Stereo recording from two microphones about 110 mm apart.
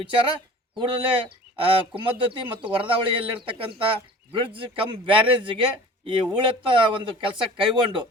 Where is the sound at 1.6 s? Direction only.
55° right (ahead or behind).